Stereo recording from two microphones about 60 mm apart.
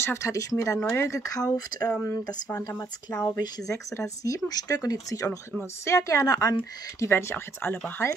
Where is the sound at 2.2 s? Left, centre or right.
Left.